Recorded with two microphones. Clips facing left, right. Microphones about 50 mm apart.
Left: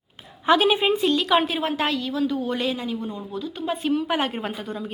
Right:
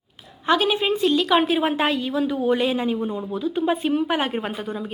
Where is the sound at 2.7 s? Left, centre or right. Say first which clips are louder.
Right 5 dB; right.